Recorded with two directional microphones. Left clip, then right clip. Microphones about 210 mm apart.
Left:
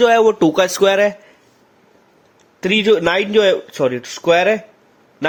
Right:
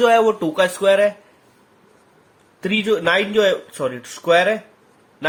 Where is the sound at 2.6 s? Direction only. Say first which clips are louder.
Left 6 dB; 35° left (ahead or behind).